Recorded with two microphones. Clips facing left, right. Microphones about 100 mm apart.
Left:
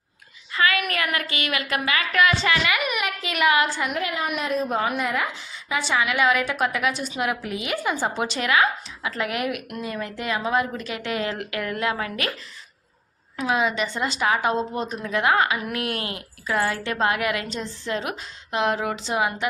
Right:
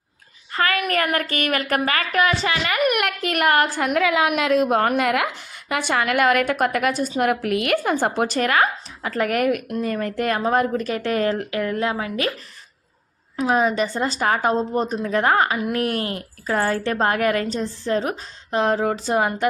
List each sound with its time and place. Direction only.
0.5 s a woman's voice: 45° right (ahead or behind)
2.1 s a woman's voice: 30° right (ahead or behind)
2.8 s a woman's voice: 65° right (ahead or behind)
3.9 s a woman's voice: 90° right
4.8 s a woman's voice: 60° right (ahead or behind); by 11.3 s 40° right (ahead or behind)
11.3 s speech: 30° right (ahead or behind)
13.3 s a woman's voice: 40° right (ahead or behind)